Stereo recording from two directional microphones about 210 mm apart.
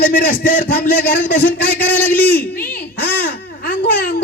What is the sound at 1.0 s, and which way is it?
A man's voice, 10° left (ahead or behind).